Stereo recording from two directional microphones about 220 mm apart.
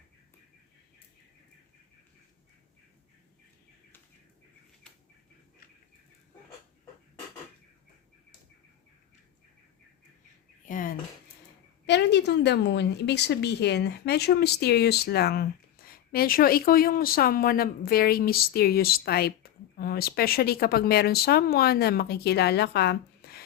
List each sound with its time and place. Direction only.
10.7 s dishes: 40° left (ahead or behind)
11.9 s a woman's voice: 50° left (ahead or behind)